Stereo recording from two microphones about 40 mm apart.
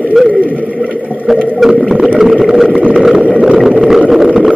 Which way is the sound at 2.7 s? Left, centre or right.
Right.